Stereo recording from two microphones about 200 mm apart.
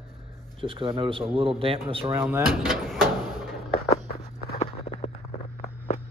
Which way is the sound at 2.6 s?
Centre (ahead or behind).